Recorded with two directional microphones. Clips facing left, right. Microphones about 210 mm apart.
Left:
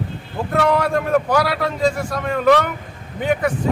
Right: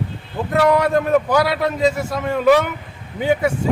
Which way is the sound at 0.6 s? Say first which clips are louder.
Right 3 dB; centre (ahead or behind).